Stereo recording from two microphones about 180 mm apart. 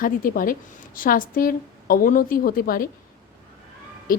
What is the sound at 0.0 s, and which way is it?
A woman's voice, 50° left (ahead or behind).